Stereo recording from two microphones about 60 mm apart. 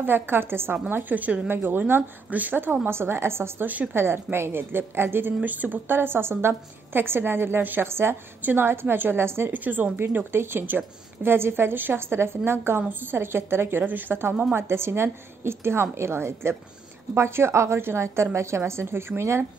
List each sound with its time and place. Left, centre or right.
0.0 s a woman's voice: right
3.6 s speech: right
3.9 s a woman's voice: right
8.4 s a woman's voice: right
9.5 s speech: right
9.9 s a woman's voice: right